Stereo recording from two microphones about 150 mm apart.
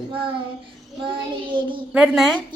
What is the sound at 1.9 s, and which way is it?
Speech, 5° right (ahead or behind).